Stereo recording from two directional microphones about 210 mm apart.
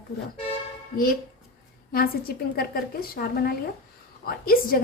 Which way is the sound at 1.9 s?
45° left (ahead or behind).